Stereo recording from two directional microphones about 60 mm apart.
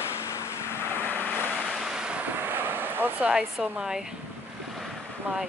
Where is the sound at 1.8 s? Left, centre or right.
Centre.